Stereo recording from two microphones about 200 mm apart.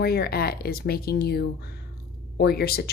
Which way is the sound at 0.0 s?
50° left (ahead or behind).